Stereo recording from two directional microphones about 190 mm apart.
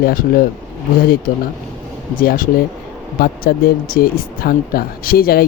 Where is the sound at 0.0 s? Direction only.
50° left (ahead or behind).